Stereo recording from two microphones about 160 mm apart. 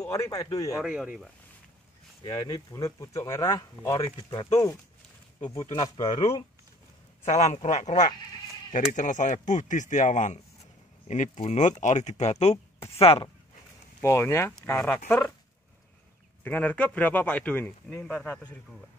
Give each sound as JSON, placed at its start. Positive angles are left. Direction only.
{"t": 0.1, "sound": "speech", "side_deg": 20}
{"t": 0.7, "sound": "speech", "side_deg": -5}
{"t": 2.2, "sound": "speech", "side_deg": 25}
{"t": 7.2, "sound": "speech", "side_deg": 45}
{"t": 14.0, "sound": "speech", "side_deg": 15}
{"t": 16.4, "sound": "speech", "side_deg": 10}